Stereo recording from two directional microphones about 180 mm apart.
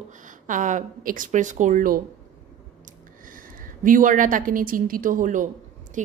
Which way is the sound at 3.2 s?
50° right (ahead or behind).